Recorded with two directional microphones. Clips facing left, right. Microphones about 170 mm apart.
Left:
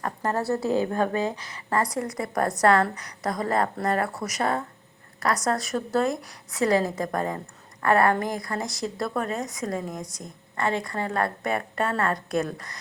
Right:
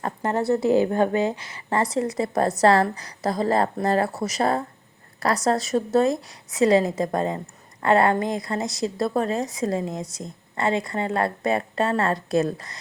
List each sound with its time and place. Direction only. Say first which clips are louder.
0.0 s speech: right 3 dB; 25° right (ahead or behind)